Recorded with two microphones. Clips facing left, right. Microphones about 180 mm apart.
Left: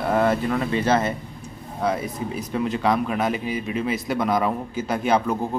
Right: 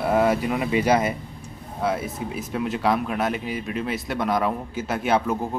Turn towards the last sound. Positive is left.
turn(degrees=-5)  # may be behind; listen again after turning